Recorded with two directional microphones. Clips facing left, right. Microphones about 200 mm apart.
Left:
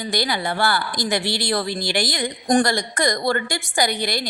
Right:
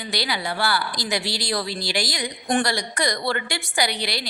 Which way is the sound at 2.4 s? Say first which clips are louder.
Left 5 dB; 45° left (ahead or behind).